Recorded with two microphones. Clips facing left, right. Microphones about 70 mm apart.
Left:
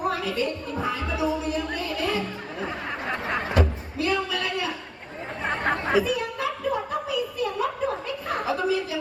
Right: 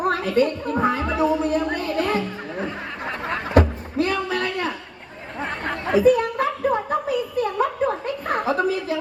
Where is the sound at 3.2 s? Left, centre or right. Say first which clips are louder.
Right 7 dB; right.